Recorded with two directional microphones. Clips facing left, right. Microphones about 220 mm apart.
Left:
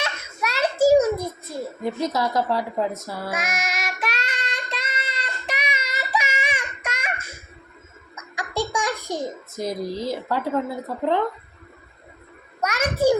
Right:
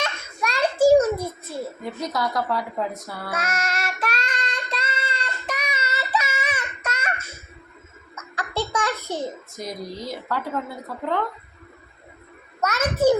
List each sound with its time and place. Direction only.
0.0 s a sound: 5° left (ahead or behind)
1.8 s a woman's voice: 25° left (ahead or behind)
3.3 s child singing: 10° left (ahead or behind)
8.1 s giggle: 10° left (ahead or behind)
9.6 s a woman's voice: 25° left (ahead or behind)
12.5 s a sound: 10° left (ahead or behind)